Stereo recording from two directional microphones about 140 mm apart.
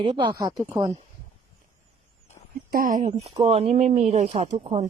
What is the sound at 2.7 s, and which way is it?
Speech, 75° right (ahead or behind).